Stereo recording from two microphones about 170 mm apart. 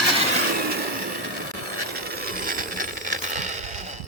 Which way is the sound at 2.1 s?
60° right (ahead or behind).